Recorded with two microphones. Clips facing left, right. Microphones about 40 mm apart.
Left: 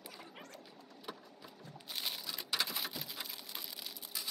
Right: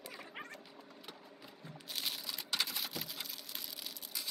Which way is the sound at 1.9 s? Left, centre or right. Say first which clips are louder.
Even; centre.